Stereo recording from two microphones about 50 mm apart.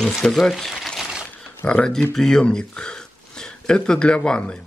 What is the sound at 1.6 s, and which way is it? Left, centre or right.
Speech, left.